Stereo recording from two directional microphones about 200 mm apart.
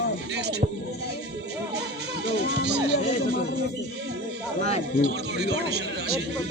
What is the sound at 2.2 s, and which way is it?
Speech, 55° right (ahead or behind).